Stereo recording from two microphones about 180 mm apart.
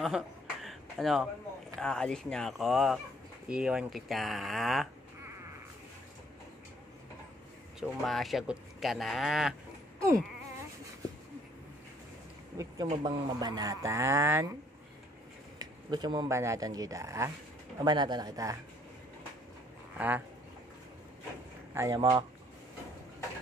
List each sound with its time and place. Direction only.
0.0 s a sound: centre (ahead or behind)
1.8 s speech: 5° left (ahead or behind)
7.8 s speech: centre (ahead or behind)
9.9 s wail: 15° right (ahead or behind)
12.9 s speech: 25° right (ahead or behind)
15.6 s speech: 25° right (ahead or behind)
20.0 s speech: 10° right (ahead or behind)
21.7 s speech: 20° right (ahead or behind)